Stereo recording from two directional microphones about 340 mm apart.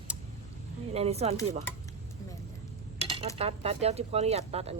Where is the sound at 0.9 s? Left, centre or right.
Centre.